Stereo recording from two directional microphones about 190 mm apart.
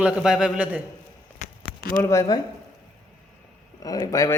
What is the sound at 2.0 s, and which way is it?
Speech, 15° left (ahead or behind).